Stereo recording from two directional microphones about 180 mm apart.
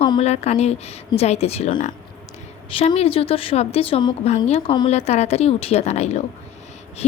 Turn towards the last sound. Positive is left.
turn(degrees=35)  # may be behind; listen again after turning